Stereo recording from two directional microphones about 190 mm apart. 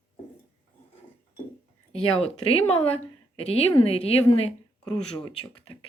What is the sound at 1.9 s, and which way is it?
A woman's voice, 35° left (ahead or behind).